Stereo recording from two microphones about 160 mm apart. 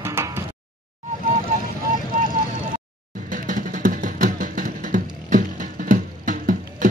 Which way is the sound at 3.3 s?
55° right (ahead or behind).